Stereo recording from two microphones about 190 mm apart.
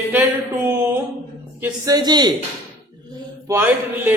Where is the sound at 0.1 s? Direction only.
10° right (ahead or behind).